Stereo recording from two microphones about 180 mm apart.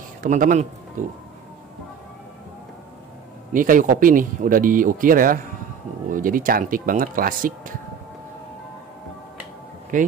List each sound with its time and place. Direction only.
0.2 s speech: 45° right (ahead or behind)
3.5 s speech: 50° right (ahead or behind)
9.9 s speech: 45° right (ahead or behind)